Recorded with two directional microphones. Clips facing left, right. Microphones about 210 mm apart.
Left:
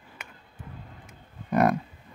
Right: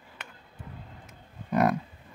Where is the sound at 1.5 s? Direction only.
50° left (ahead or behind).